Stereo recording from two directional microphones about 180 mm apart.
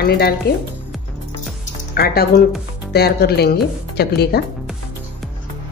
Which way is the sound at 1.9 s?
60° left (ahead or behind).